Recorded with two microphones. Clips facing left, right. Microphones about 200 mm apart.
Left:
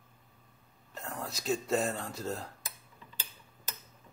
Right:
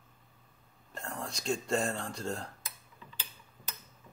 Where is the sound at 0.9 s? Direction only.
5° left (ahead or behind).